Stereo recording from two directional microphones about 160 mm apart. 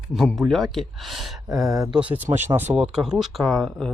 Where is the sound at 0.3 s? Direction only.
Centre (ahead or behind).